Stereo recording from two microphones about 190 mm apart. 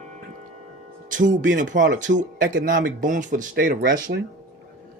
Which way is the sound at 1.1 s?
45° right (ahead or behind).